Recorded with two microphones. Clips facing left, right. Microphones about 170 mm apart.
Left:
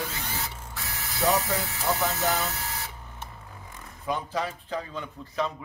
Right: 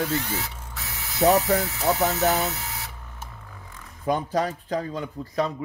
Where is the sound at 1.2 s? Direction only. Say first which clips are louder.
Right 6 dB; 45° right (ahead or behind).